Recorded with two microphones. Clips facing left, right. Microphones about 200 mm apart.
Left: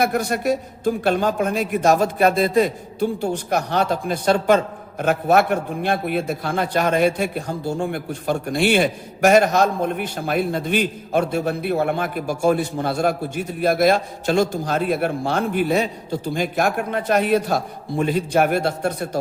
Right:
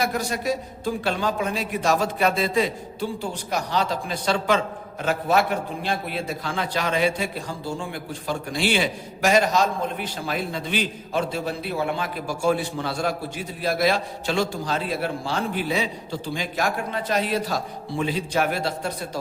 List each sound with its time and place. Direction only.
0.0 s a man's voice: 60° left (ahead or behind)